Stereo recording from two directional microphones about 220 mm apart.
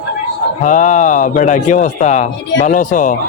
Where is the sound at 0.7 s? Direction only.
35° left (ahead or behind).